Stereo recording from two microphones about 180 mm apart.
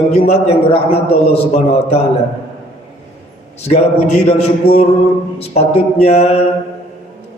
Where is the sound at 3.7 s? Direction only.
35° left (ahead or behind).